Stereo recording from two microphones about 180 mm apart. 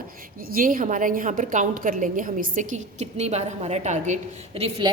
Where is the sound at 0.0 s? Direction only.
50° right (ahead or behind).